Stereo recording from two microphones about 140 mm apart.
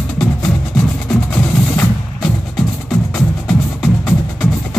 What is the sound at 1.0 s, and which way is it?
Music, 5° left (ahead or behind).